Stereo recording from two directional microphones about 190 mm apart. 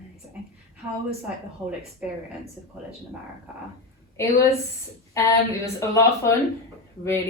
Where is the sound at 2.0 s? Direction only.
5° right (ahead or behind).